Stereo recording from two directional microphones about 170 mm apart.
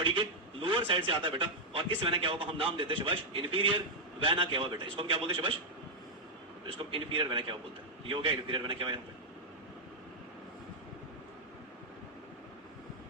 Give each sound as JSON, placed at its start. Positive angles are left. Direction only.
{"t": 0.0, "sound": "a man's voice", "side_deg": -30}
{"t": 6.7, "sound": "a man's voice", "side_deg": -30}